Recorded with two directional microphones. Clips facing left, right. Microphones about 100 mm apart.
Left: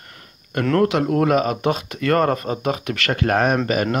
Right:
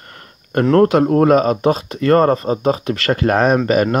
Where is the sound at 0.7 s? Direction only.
40° right (ahead or behind).